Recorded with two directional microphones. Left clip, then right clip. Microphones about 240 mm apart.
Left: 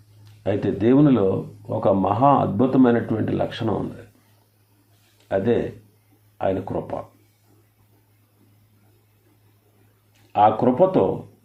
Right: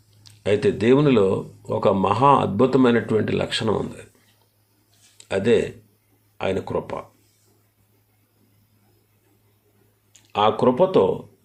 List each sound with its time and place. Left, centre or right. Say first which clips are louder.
0.4 s speech: right 2 dB; right
5.3 s speech: right 2 dB; right
10.3 s speech: left 1 dB; right